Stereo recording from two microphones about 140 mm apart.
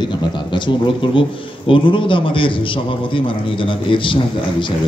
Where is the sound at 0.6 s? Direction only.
35° left (ahead or behind).